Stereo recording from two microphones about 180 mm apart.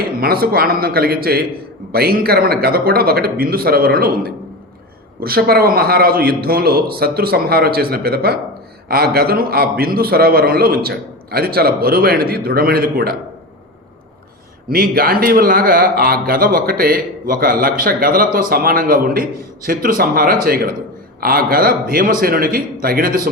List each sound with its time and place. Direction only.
0.2 s a man's voice: 55° right (ahead or behind)
14.7 s a man's voice: 55° right (ahead or behind)